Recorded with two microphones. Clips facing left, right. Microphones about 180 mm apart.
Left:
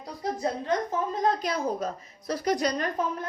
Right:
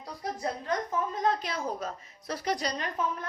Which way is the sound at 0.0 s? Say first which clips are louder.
Left 4 dB; 25° left (ahead or behind).